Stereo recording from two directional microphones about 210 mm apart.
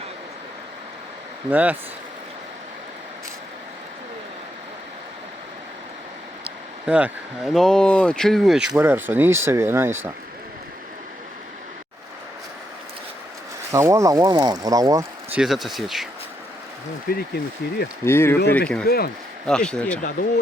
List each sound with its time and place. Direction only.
1.5 s speech: 10° right (ahead or behind)
6.4 s speech: 5° right (ahead or behind)
13.7 s speech: 15° right (ahead or behind)
15.4 s speech: centre (ahead or behind)
17.1 s speech: 50° left (ahead or behind)
18.0 s speech: 10° left (ahead or behind)
18.9 s speech: 45° left (ahead or behind)
19.5 s speech: 5° left (ahead or behind)